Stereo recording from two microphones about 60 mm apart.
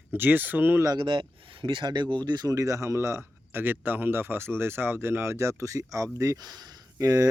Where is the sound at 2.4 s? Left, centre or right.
Right.